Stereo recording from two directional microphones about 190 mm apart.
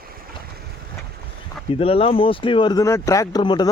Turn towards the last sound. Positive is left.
turn(degrees=25)  # may be behind; listen again after turning